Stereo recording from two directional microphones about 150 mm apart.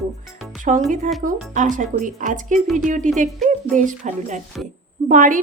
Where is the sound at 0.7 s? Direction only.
55° right (ahead or behind).